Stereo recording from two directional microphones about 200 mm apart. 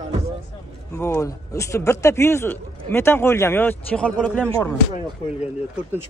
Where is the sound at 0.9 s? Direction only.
15° left (ahead or behind).